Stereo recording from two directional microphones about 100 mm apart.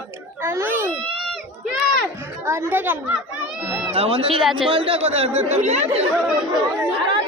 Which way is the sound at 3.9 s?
75° right (ahead or behind).